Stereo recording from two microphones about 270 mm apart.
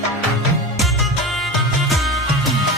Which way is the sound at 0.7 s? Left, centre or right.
Centre.